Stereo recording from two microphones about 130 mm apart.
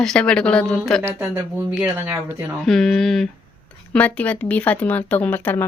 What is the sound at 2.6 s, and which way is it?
A woman's voice, 5° left (ahead or behind).